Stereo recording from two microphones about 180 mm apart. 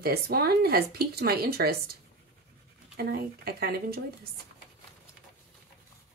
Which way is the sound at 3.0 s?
60° right (ahead or behind).